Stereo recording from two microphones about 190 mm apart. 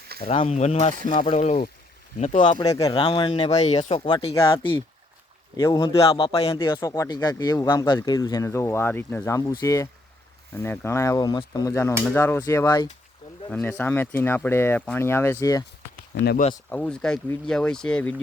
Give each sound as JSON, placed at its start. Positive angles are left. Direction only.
{"t": 0.3, "sound": "speech", "side_deg": 35}
{"t": 2.4, "sound": "speech", "side_deg": 25}
{"t": 13.5, "sound": "speech", "side_deg": 10}
{"t": 16.1, "sound": "speech", "side_deg": 60}
{"t": 16.7, "sound": "speech", "side_deg": 5}